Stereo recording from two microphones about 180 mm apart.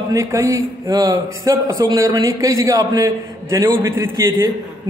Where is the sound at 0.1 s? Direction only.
15° right (ahead or behind).